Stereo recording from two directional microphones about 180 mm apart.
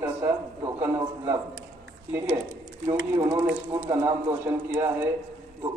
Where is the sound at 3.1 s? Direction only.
20° right (ahead or behind).